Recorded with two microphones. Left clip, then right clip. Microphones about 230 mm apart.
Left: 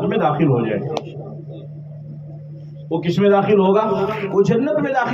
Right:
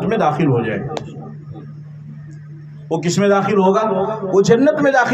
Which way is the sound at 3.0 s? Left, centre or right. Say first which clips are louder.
Even; right.